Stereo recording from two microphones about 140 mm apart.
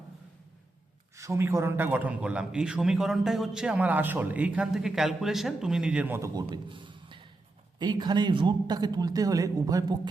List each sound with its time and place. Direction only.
1.1 s a man's voice: 20° right (ahead or behind)